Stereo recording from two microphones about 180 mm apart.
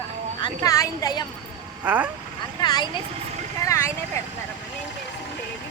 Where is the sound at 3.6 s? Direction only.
15° left (ahead or behind).